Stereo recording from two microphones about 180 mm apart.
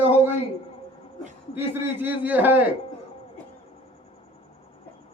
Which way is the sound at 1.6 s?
10° right (ahead or behind).